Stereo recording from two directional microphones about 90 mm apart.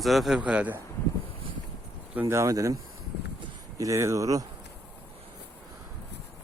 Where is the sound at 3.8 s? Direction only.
35° right (ahead or behind).